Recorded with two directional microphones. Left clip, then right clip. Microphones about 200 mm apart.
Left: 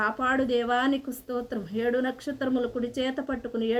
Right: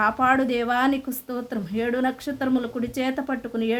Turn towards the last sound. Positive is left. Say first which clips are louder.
# right 3 dB
turn(degrees=-30)  # may be behind; listen again after turning